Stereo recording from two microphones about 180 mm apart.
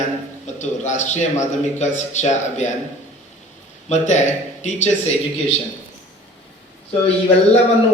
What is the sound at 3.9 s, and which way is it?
A man's voice, 40° left (ahead or behind).